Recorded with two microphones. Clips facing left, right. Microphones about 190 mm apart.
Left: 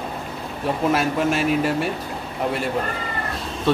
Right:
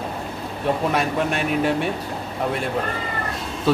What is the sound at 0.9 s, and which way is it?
A man's voice, centre (ahead or behind).